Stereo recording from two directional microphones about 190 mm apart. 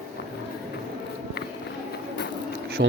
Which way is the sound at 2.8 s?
65° right (ahead or behind).